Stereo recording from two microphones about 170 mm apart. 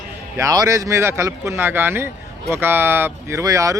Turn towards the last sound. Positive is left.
turn(degrees=-20)  # may be behind; listen again after turning